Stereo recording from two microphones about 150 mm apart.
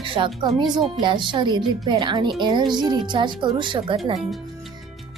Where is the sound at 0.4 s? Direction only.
30° right (ahead or behind).